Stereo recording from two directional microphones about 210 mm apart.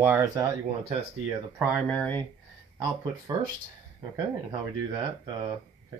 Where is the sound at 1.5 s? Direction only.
10° right (ahead or behind).